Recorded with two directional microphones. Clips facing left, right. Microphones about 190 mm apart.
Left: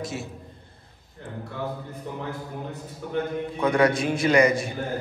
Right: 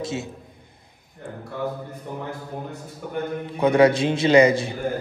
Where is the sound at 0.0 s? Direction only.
25° right (ahead or behind).